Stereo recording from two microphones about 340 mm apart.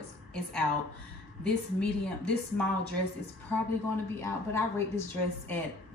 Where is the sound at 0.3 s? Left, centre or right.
Centre.